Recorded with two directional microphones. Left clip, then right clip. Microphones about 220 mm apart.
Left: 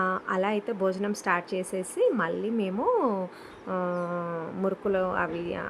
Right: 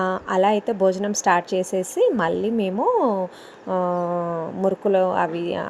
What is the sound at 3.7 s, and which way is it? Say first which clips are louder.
A woman's voice: right 8 dB; 5° right (ahead or behind).